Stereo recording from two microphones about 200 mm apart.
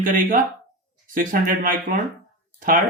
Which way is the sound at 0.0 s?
40° right (ahead or behind).